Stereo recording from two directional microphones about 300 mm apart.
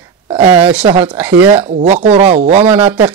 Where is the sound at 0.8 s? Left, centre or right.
Centre.